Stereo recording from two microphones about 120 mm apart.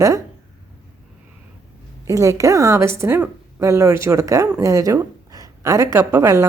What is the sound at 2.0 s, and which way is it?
A woman's voice, 25° right (ahead or behind).